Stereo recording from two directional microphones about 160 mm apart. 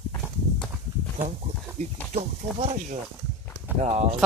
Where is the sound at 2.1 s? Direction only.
40° right (ahead or behind).